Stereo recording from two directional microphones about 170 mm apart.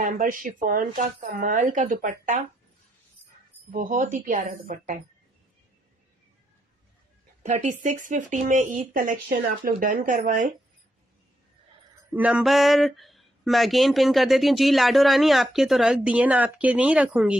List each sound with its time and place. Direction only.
0.0 s speech: 50° right (ahead or behind)
3.7 s speech: 50° right (ahead or behind)
7.5 s speech: 45° right (ahead or behind)
12.1 s speech: 5° right (ahead or behind)